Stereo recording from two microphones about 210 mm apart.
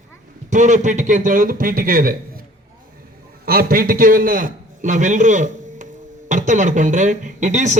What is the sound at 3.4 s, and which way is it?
A man's voice, 45° right (ahead or behind).